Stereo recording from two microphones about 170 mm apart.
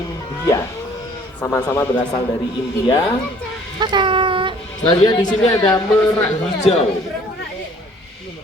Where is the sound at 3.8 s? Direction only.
25° right (ahead or behind).